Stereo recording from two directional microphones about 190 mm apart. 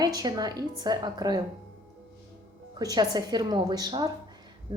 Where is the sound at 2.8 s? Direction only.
20° right (ahead or behind).